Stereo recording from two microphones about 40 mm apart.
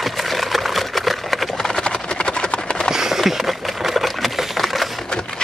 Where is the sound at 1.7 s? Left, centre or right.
Centre.